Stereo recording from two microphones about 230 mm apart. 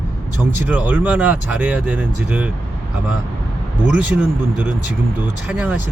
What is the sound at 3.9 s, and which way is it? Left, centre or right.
Speech, centre.